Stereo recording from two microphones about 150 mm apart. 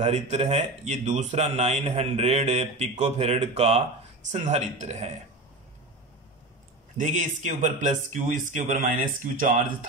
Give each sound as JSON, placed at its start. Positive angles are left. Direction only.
{"t": 0.0, "sound": "speech", "side_deg": -45}
{"t": 7.0, "sound": "speech", "side_deg": -55}